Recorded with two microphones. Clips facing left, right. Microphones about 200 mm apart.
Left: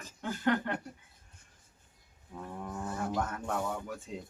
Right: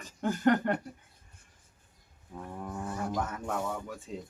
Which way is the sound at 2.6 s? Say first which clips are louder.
Right 1 dB; 5° right (ahead or behind).